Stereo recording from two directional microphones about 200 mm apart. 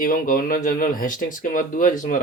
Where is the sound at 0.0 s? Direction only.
45° left (ahead or behind).